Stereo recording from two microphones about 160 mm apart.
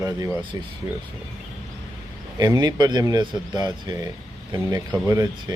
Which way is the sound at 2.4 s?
25° right (ahead or behind).